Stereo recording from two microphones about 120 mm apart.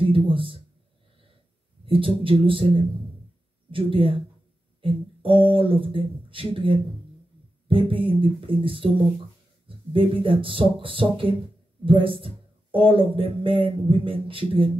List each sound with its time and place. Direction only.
0.0 s speech: 45° right (ahead or behind)
1.9 s speech: 45° right (ahead or behind)